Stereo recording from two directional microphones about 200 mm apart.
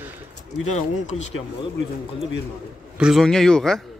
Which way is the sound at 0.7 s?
35° left (ahead or behind).